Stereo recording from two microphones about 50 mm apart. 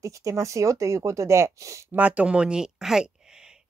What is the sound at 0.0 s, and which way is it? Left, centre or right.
Speech, right.